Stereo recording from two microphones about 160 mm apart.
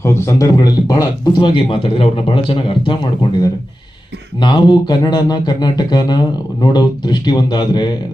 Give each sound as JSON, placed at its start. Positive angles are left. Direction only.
{"t": 0.0, "sound": "speech", "side_deg": 15}
{"t": 4.4, "sound": "speech", "side_deg": 30}